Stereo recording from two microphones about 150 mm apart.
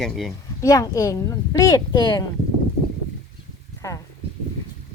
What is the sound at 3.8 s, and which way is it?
Speech, 20° left (ahead or behind).